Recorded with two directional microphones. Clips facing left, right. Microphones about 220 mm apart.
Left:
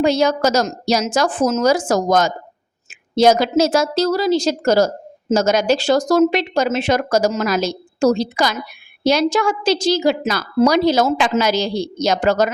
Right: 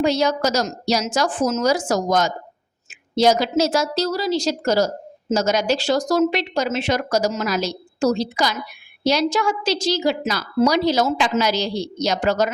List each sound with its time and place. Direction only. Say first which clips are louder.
0.0 s a woman's voice: left 3 dB; 50° left (ahead or behind)
2.9 s a sound: left 3 dB; 50° left (ahead or behind)
3.6 s a woman's voice: left 4 dB; 50° left (ahead or behind)